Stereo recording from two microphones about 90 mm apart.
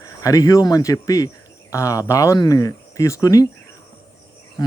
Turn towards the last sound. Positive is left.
turn(degrees=40)  # may be behind; listen again after turning